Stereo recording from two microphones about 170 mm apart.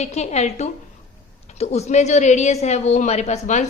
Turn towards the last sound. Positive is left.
turn(degrees=40)  # may be behind; listen again after turning